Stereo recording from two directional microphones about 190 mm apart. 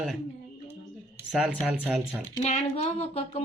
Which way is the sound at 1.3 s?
5° right (ahead or behind).